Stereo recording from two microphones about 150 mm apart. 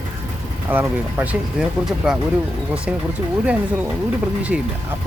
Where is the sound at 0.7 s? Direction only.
15° right (ahead or behind).